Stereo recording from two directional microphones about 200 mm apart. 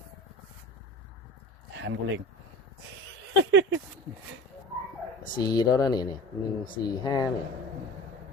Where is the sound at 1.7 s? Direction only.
70° right (ahead or behind).